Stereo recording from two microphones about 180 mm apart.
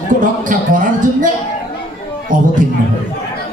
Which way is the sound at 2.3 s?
45° right (ahead or behind).